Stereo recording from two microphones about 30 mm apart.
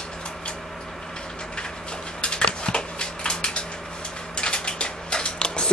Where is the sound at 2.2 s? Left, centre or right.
Left.